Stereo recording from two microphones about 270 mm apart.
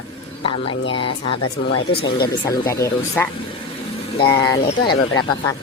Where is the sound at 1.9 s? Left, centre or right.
Left.